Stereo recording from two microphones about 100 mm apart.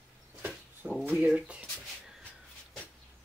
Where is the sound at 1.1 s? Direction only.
10° right (ahead or behind).